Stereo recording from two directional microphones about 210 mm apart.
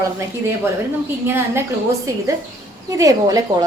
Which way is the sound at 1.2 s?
10° right (ahead or behind).